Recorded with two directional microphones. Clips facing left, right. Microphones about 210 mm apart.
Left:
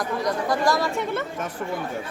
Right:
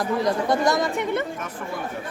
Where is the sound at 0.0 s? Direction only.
25° right (ahead or behind).